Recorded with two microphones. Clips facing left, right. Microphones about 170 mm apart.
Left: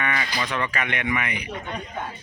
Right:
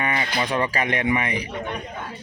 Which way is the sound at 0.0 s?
25° right (ahead or behind).